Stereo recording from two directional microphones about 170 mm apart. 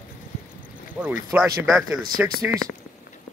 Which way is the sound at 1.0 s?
15° right (ahead or behind).